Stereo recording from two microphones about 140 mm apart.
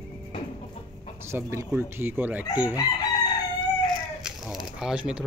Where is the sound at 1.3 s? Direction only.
20° right (ahead or behind).